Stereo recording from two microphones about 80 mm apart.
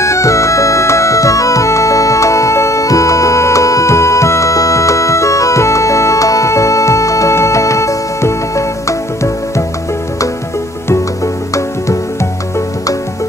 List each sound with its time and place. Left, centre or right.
0.0 s music: left
11.5 s music: left